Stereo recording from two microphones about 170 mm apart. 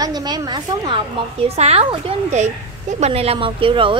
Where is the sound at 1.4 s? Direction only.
40° right (ahead or behind).